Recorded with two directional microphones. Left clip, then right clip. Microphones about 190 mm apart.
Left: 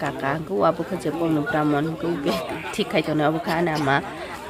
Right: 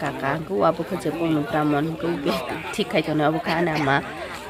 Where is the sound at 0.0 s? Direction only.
Centre (ahead or behind).